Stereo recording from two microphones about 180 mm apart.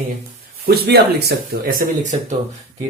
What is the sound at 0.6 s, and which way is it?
Speech, 60° right (ahead or behind).